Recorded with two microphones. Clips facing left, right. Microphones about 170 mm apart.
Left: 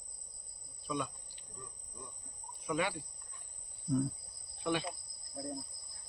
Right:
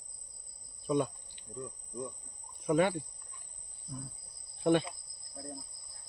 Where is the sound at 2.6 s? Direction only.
45° right (ahead or behind).